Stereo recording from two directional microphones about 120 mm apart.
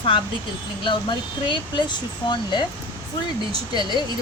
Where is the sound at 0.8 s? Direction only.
40° left (ahead or behind).